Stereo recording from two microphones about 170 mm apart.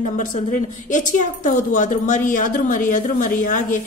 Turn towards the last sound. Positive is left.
turn(degrees=50)  # may be behind; listen again after turning